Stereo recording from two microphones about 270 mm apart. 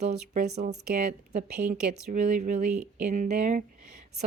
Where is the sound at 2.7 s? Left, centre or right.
Centre.